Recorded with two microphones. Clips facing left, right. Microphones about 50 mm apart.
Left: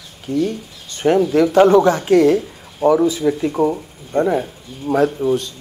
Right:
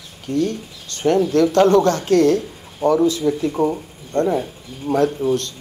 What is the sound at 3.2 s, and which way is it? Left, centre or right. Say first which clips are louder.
Speech: left 2 dB; left.